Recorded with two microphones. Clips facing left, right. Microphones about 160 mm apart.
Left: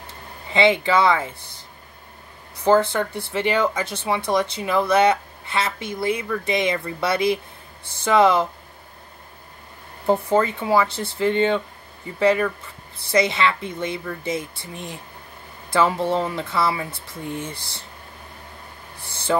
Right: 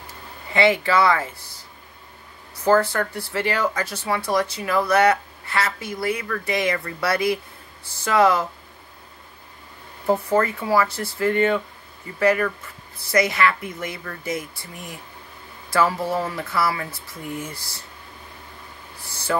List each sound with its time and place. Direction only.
0.5 s speech: 20° left (ahead or behind)
2.6 s speech: 20° left (ahead or behind)
10.3 s speech: 20° left (ahead or behind)